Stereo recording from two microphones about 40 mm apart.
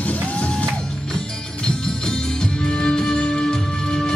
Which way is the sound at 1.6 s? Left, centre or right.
Centre.